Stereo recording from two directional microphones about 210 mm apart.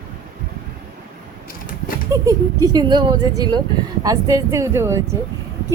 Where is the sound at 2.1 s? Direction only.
15° right (ahead or behind).